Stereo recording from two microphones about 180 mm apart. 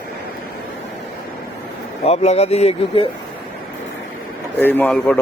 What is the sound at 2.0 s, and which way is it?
Speech, 35° left (ahead or behind).